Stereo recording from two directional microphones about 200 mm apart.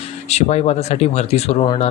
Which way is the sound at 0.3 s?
35° left (ahead or behind).